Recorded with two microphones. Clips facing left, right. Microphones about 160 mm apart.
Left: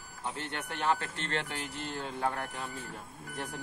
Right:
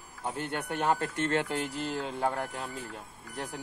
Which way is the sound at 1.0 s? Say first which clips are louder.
Right 7 dB; 40° right (ahead or behind).